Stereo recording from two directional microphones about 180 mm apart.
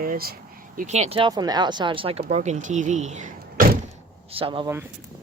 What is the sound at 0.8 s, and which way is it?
Speech, 40° right (ahead or behind).